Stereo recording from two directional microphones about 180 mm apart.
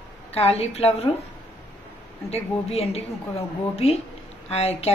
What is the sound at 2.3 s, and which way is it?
A woman's voice, 35° left (ahead or behind).